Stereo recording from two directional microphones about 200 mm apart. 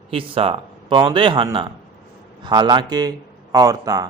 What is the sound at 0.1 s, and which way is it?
A man's voice, 25° right (ahead or behind).